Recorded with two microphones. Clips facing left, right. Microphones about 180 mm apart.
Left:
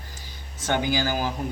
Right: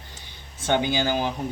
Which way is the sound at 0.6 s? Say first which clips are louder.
Right 2 dB; 20° right (ahead or behind).